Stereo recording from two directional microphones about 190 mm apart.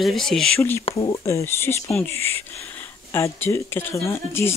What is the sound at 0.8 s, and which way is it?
Speech, 20° left (ahead or behind).